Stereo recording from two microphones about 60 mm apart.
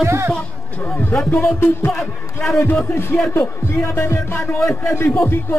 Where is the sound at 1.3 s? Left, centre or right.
Left.